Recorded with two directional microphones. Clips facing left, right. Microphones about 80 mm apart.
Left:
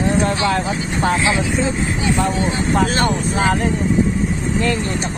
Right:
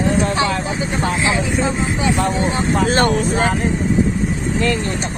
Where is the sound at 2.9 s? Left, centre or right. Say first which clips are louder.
Right 3 dB; right.